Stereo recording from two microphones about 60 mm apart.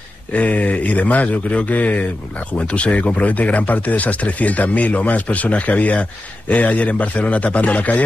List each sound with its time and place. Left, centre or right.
0.3 s speech: left